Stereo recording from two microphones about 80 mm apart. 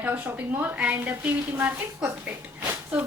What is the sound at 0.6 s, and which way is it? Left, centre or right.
Speech, centre.